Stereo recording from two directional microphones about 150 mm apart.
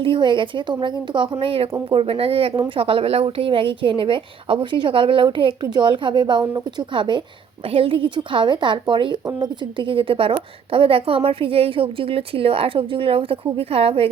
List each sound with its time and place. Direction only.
0.0 s a woman's voice: 35° right (ahead or behind)